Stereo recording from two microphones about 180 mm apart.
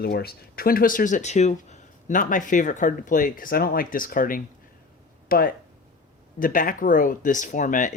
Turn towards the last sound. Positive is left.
turn(degrees=45)  # may be behind; listen again after turning